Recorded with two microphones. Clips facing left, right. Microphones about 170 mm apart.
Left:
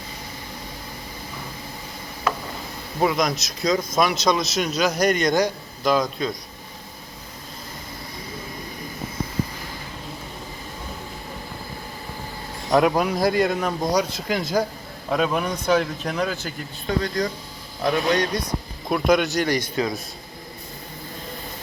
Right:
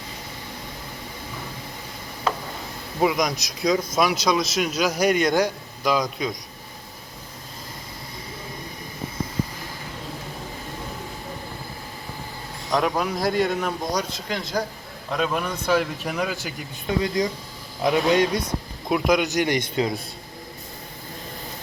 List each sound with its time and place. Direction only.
3.0 s a man's voice: 10° right (ahead or behind)
13.0 s a man's voice: centre (ahead or behind); by 18.4 s 20° right (ahead or behind)
18.9 s a man's voice: 10° right (ahead or behind)